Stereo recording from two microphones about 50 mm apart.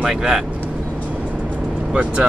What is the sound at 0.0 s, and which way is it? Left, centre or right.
Speech, centre.